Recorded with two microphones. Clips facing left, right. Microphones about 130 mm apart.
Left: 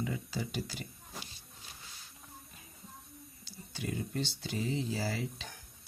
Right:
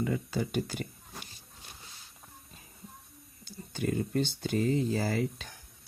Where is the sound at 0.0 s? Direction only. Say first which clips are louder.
Right 6 dB; 55° right (ahead or behind).